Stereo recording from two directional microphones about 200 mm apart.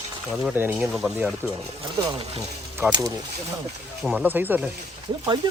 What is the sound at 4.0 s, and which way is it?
Speech, 5° right (ahead or behind).